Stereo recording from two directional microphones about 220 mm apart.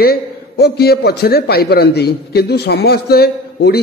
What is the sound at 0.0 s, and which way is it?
A man's voice, 45° left (ahead or behind).